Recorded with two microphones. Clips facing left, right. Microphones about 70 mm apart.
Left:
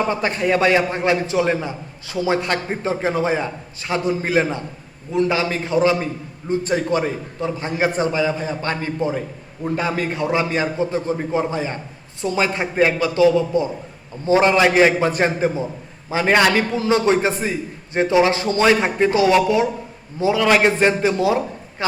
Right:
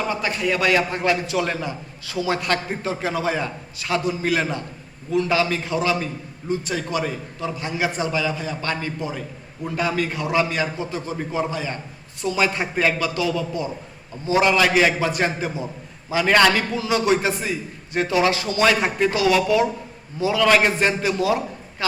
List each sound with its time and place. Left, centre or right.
0.1 s a man's voice: left
16.3 s a man's voice: centre
16.7 s a man's voice: left